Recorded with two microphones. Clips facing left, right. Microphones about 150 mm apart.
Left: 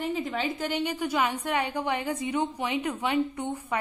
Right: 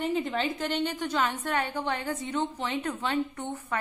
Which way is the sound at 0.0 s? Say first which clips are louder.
Right 1 dB; centre (ahead or behind).